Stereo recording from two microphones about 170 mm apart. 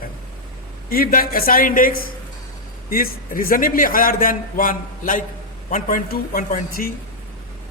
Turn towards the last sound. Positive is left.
turn(degrees=55)  # may be behind; listen again after turning